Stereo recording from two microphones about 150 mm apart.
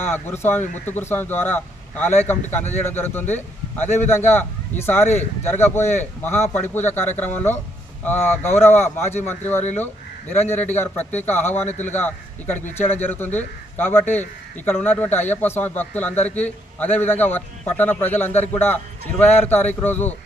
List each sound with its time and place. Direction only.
0.0 s a man's voice: 15° left (ahead or behind)